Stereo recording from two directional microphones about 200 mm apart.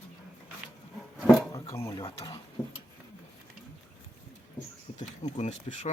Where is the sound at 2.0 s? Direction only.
25° left (ahead or behind).